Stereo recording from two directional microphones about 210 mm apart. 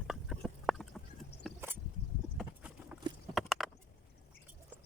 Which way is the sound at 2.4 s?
5° right (ahead or behind).